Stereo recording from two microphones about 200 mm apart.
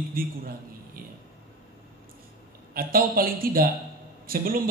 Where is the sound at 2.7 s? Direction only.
45° right (ahead or behind).